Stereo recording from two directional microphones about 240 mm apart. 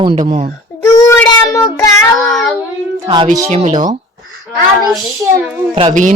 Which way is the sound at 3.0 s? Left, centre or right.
Centre.